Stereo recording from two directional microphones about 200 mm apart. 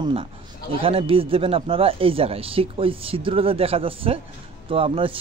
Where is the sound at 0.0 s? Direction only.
25° right (ahead or behind).